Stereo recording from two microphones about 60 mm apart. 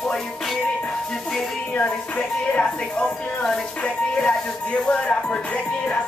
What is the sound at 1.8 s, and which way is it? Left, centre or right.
Speech, left.